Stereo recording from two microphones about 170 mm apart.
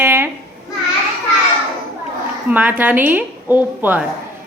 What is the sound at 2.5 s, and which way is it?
A woman's voice, 10° right (ahead or behind).